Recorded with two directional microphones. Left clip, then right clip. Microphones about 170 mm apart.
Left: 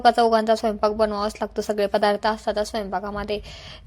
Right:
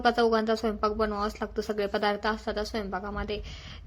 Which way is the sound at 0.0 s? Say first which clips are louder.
Left 7 dB; 40° left (ahead or behind).